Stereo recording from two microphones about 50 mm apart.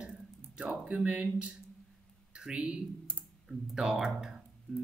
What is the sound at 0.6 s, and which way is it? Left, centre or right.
Speech, right.